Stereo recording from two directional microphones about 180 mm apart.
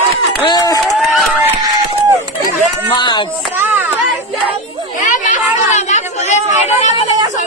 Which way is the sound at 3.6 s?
10° right (ahead or behind).